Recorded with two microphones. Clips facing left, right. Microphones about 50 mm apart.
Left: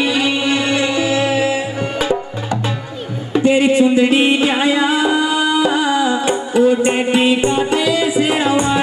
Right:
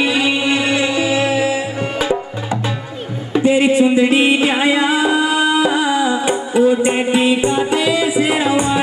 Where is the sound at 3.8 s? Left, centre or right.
Centre.